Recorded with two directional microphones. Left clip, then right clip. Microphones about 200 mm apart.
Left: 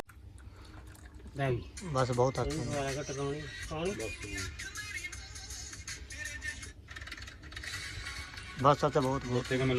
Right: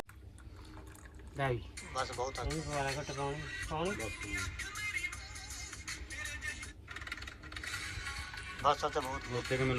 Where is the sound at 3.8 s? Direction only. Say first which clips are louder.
Left 1 dB; 10° right (ahead or behind).